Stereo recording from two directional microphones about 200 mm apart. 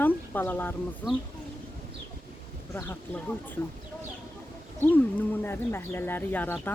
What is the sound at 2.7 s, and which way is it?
Speech, 10° left (ahead or behind).